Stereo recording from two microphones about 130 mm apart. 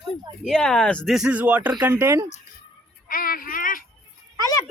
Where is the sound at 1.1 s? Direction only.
10° right (ahead or behind).